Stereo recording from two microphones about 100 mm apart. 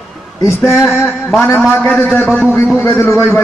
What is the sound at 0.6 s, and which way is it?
Speech, 25° left (ahead or behind).